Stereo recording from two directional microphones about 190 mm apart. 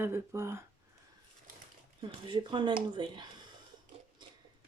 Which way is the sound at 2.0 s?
25° right (ahead or behind).